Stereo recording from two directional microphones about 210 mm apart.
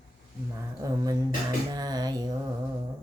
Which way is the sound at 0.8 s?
15° right (ahead or behind).